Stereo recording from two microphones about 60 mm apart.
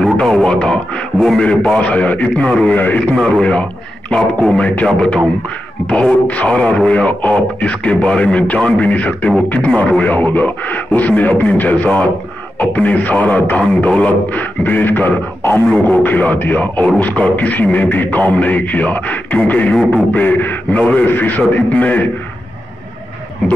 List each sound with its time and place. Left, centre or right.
0.0 s speech: centre
2.7 s speech: left
5.9 s speech: left